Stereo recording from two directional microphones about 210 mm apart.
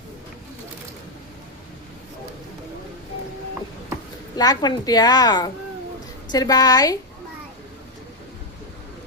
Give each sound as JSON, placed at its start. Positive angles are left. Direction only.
{"t": 4.4, "sound": "a woman's voice", "side_deg": 20}